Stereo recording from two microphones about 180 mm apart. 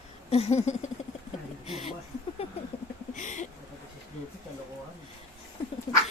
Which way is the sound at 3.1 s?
45° left (ahead or behind).